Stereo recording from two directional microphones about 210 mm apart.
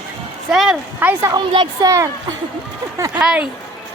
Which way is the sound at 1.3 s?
20° right (ahead or behind).